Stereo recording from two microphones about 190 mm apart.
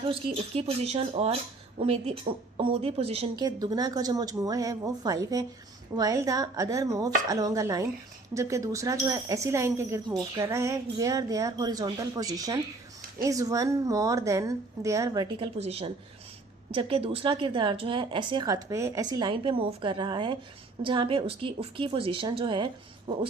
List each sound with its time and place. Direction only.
0.1 s speech: 30° right (ahead or behind)
15.5 s speech: 35° right (ahead or behind)